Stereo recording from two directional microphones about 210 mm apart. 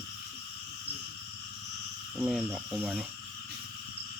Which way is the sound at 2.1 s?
5° right (ahead or behind).